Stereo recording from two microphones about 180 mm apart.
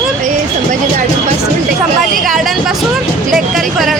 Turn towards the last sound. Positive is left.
turn(degrees=0)  # may be behind; listen again after turning